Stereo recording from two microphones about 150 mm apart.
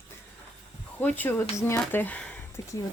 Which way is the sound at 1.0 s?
10° left (ahead or behind).